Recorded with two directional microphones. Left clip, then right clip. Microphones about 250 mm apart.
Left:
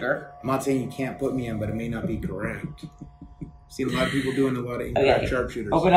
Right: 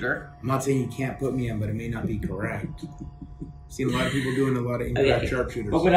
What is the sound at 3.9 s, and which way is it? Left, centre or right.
Speech, left.